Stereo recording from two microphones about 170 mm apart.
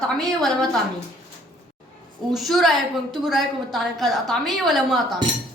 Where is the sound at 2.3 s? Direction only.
Centre (ahead or behind).